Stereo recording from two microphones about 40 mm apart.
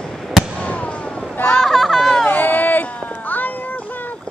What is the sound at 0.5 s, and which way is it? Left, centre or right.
Fireworks, left.